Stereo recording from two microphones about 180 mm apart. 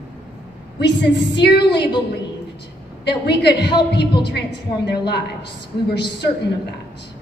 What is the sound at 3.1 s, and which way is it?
A woman's voice, 70° left (ahead or behind).